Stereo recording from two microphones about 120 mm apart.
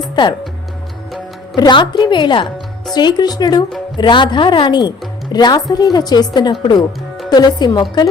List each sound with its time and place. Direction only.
1.5 s speech: 35° left (ahead or behind)